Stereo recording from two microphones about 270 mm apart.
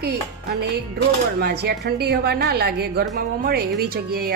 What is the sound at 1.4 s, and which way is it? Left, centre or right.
Speech, right.